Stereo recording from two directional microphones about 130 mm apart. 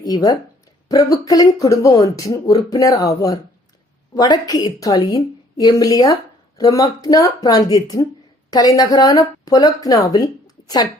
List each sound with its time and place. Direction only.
0.0 s a woman's voice: 30° left (ahead or behind)